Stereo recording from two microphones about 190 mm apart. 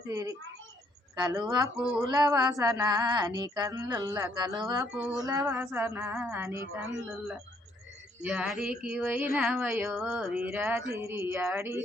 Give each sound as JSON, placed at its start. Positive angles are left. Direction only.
{"t": 0.1, "sound": "speech", "side_deg": -15}
{"t": 1.2, "sound": "female singing", "side_deg": -20}
{"t": 1.8, "sound": "female singing", "side_deg": -5}
{"t": 2.0, "sound": "female singing", "side_deg": -20}
{"t": 4.9, "sound": "female singing", "side_deg": -5}
{"t": 5.2, "sound": "speech", "side_deg": -20}
{"t": 8.2, "sound": "female singing", "side_deg": -5}
{"t": 10.8, "sound": "speech", "side_deg": -15}